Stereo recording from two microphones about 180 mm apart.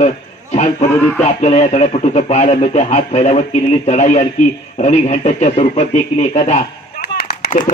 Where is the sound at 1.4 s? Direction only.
35° left (ahead or behind).